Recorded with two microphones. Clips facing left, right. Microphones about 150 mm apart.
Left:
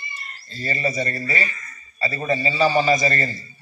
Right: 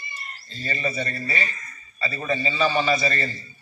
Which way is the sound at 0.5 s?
40° left (ahead or behind).